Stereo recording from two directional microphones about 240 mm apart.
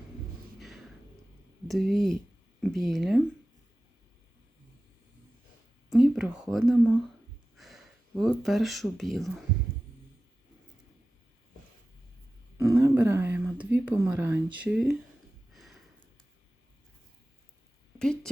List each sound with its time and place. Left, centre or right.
0.6 s music: centre
1.6 s speech: centre
5.9 s speech: centre
12.5 s speech: centre
15.5 s a sound: centre
18.0 s speech: centre